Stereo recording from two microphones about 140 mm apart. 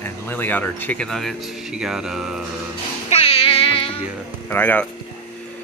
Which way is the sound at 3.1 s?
45° left (ahead or behind).